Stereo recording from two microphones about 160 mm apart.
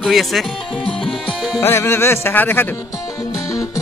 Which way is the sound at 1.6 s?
15° left (ahead or behind).